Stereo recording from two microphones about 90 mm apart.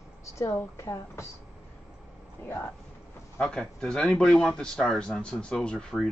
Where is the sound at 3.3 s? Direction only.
10° left (ahead or behind).